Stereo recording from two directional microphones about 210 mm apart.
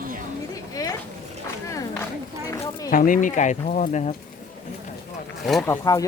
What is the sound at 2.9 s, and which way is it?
Speech, 40° left (ahead or behind).